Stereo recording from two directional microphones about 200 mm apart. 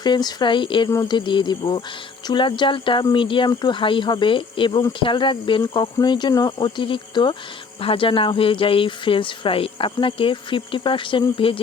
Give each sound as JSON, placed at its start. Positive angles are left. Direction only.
{"t": 0.0, "sound": "speech", "side_deg": 20}